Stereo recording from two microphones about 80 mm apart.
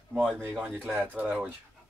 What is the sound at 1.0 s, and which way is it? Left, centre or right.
Speech, right.